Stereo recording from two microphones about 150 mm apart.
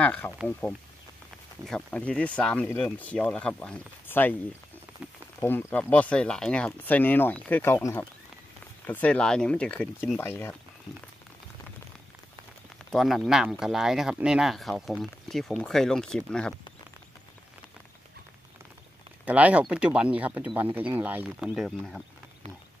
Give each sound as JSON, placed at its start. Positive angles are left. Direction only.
{"t": 0.0, "sound": "speech", "side_deg": 10}
{"t": 5.4, "sound": "speech", "side_deg": 15}
{"t": 10.2, "sound": "speech", "side_deg": 15}
{"t": 12.9, "sound": "speech", "side_deg": 0}
{"t": 19.2, "sound": "speech", "side_deg": -10}